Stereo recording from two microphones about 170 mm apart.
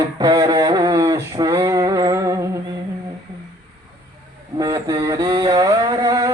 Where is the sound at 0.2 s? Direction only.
20° right (ahead or behind).